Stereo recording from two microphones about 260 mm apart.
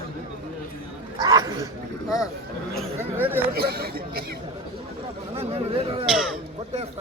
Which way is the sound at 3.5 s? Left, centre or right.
Right.